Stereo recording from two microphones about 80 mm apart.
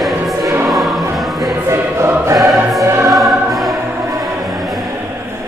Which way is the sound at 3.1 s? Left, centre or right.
Centre.